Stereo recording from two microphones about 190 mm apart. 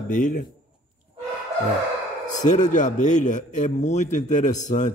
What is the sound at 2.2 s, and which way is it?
Speech, 40° left (ahead or behind).